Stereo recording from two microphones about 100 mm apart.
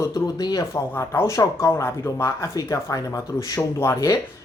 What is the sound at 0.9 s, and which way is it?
Speech, 25° left (ahead or behind).